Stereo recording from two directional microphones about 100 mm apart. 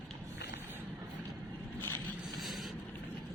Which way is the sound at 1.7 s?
20° left (ahead or behind).